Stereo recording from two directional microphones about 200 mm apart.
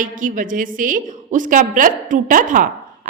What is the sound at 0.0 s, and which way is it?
A woman's voice, 40° right (ahead or behind).